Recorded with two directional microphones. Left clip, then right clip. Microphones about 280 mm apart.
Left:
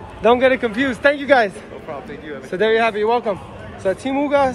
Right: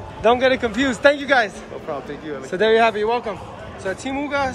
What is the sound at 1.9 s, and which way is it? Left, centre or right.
Speech, right.